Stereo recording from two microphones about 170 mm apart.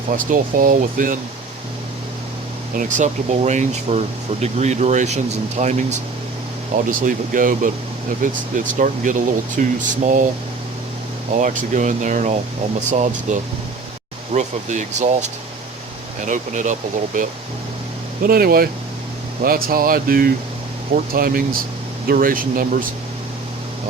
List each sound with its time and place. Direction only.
0.3 s speech: 55° right (ahead or behind)
2.7 s speech: 45° right (ahead or behind)
7.0 s speech: 50° right (ahead or behind)
11.3 s speech: 45° right (ahead or behind)